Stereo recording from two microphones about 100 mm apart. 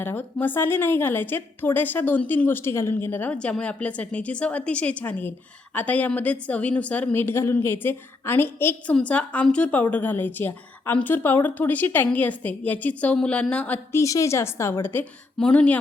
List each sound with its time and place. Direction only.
0.0 s a woman's voice: 20° left (ahead or behind)
13.9 s a woman's voice: 30° left (ahead or behind)
15.4 s a woman's voice: 10° left (ahead or behind)